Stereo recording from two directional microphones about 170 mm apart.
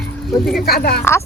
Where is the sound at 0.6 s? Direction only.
65° left (ahead or behind).